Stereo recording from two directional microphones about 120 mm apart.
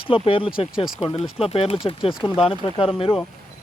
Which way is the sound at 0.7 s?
5° right (ahead or behind).